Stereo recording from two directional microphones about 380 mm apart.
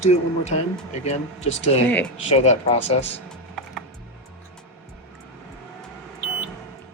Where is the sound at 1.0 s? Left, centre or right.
Centre.